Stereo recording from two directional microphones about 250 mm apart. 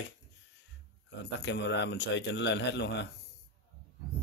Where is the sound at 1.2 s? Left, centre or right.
Left.